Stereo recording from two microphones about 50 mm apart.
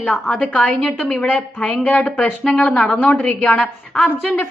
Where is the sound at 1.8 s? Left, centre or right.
Left.